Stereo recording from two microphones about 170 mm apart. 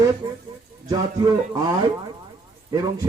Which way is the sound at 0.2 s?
25° right (ahead or behind).